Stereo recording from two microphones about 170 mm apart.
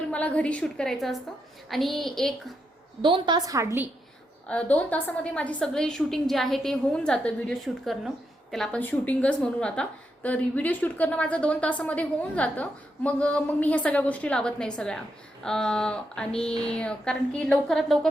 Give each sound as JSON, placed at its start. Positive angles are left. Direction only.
{"t": 0.1, "sound": "a woman's voice", "side_deg": 10}
{"t": 3.0, "sound": "a woman's voice", "side_deg": -25}
{"t": 4.4, "sound": "a woman's voice", "side_deg": 10}